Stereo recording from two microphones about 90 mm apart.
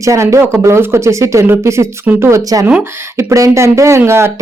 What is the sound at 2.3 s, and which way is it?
Speech, 40° right (ahead or behind).